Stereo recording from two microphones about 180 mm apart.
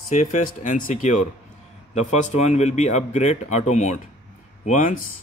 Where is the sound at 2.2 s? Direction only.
40° left (ahead or behind).